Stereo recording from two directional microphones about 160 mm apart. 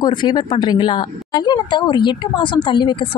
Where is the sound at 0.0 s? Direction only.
30° left (ahead or behind).